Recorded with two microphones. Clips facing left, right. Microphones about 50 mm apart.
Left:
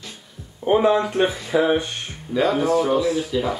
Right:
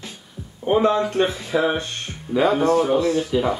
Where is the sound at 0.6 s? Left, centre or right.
Centre.